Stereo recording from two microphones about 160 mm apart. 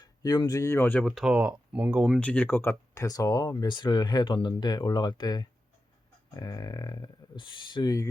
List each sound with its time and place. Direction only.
0.0 s speech: 25° left (ahead or behind)
1.0 s speech: centre (ahead or behind); by 8.0 s 25° left (ahead or behind)